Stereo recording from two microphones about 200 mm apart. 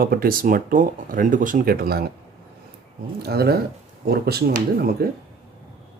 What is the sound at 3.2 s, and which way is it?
Speech, 50° right (ahead or behind).